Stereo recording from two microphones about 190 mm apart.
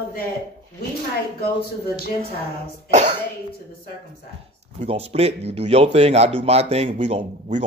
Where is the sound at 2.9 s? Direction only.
40° right (ahead or behind).